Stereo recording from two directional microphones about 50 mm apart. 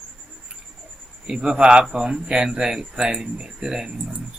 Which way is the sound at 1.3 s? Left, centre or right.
Centre.